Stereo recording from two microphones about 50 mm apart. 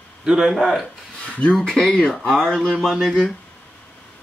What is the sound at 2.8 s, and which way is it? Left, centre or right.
Speech, centre.